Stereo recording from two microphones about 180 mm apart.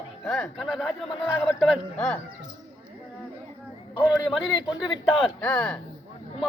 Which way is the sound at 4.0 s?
25° left (ahead or behind).